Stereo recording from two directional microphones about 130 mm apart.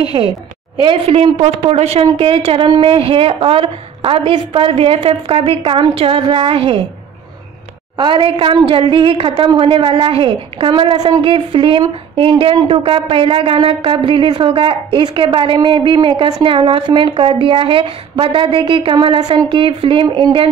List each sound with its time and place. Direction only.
0.1 s a woman's voice: 30° right (ahead or behind)
8.0 s a woman's voice: 40° right (ahead or behind)